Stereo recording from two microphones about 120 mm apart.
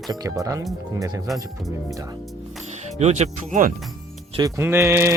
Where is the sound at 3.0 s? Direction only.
70° right (ahead or behind).